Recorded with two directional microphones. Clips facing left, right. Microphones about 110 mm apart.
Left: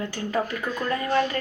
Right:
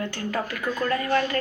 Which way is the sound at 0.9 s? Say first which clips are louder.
Left 1 dB; 15° left (ahead or behind).